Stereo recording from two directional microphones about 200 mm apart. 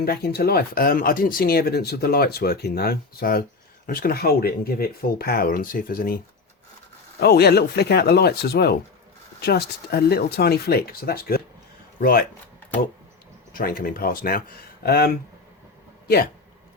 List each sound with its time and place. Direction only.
0.0 s speech: 50° left (ahead or behind)
7.2 s speech: 55° left (ahead or behind)
13.5 s speech: 45° left (ahead or behind)